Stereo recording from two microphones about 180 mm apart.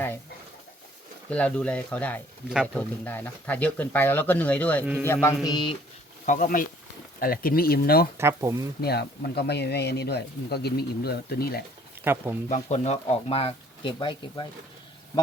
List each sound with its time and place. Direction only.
1.3 s speech: 5° left (ahead or behind)
5.0 s music: 15° left (ahead or behind)
6.2 s speech: 45° left (ahead or behind)
8.2 s speech: 15° right (ahead or behind)
8.8 s speech: 60° left (ahead or behind)
12.0 s speech: 10° right (ahead or behind)
12.5 s speech: 40° left (ahead or behind)